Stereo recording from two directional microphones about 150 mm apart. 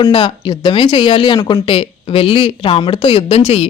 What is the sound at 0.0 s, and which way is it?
A man's voice, 30° left (ahead or behind).